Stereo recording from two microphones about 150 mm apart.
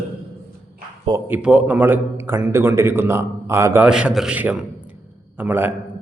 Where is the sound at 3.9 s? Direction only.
5° right (ahead or behind).